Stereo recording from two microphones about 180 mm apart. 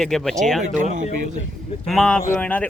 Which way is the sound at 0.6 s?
40° right (ahead or behind).